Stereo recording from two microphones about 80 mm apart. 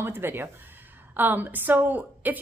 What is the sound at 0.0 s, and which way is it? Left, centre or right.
A woman's voice, right.